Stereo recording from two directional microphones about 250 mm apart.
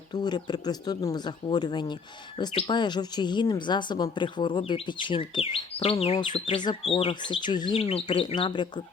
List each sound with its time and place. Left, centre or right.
0.1 s speech: centre